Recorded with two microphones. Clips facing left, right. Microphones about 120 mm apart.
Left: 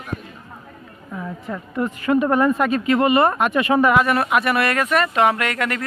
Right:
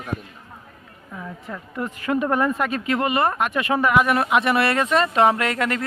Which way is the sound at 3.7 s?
20° left (ahead or behind).